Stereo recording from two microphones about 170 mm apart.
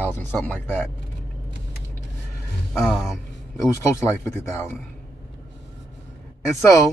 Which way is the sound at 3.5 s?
20° left (ahead or behind).